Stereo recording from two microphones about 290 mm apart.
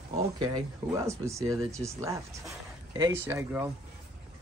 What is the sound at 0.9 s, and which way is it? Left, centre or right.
Speech, centre.